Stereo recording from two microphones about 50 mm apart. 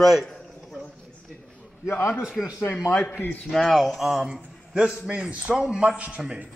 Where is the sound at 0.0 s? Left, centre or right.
Centre.